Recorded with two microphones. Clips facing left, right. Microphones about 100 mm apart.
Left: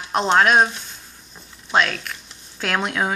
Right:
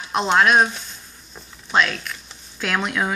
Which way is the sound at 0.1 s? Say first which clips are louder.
Left 1 dB; 45° left (ahead or behind).